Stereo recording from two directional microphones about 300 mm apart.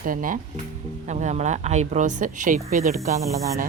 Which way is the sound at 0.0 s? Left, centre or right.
Right.